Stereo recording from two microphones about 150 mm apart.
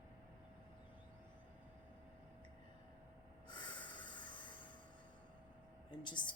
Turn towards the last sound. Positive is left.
turn(degrees=30)  # may be behind; listen again after turning